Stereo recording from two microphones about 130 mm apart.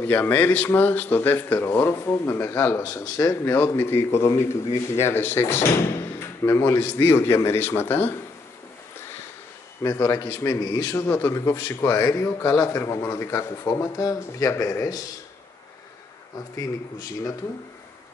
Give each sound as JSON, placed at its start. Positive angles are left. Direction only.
{"t": 0.0, "sound": "speech", "side_deg": 15}
{"t": 2.8, "sound": "a man's voice", "side_deg": 30}
{"t": 9.8, "sound": "a man's voice", "side_deg": 20}
{"t": 16.3, "sound": "a man's voice", "side_deg": 25}